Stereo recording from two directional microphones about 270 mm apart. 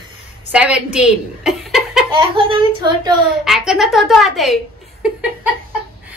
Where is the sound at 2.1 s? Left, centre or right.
Centre.